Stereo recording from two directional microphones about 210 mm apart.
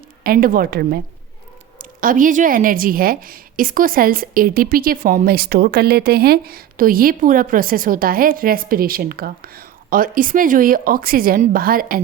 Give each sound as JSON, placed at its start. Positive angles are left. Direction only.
{"t": 0.2, "sound": "a woman's voice", "side_deg": -45}